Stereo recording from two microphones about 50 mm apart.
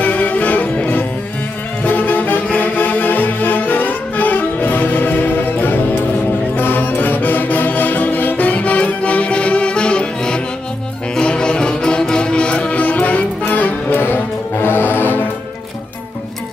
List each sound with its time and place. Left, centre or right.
0.0 s music: left